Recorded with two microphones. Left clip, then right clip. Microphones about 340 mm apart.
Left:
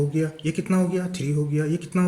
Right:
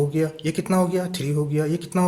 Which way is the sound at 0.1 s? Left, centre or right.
Centre.